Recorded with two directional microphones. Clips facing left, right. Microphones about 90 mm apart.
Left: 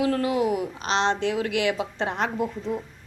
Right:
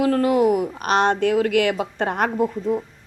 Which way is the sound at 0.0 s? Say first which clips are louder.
Right 6 dB; 45° right (ahead or behind).